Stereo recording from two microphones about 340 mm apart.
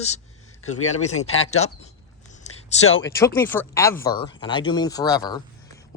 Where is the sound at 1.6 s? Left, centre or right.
Centre.